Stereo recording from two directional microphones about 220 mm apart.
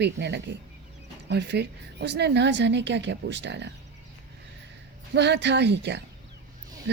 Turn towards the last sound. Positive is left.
turn(degrees=-50)  # may be behind; listen again after turning